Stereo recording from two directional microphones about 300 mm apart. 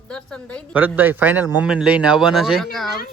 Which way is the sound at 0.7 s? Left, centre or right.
Centre.